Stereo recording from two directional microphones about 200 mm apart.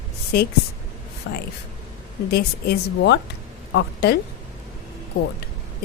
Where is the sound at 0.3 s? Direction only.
55° left (ahead or behind).